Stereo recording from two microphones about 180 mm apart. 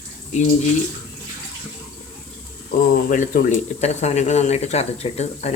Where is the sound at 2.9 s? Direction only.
50° left (ahead or behind).